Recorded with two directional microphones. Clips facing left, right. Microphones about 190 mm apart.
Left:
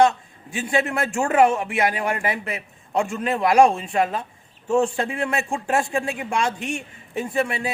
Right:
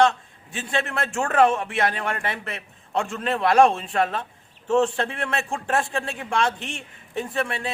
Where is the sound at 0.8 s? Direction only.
15° left (ahead or behind).